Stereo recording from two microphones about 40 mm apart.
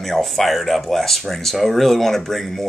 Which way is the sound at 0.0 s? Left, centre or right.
Centre.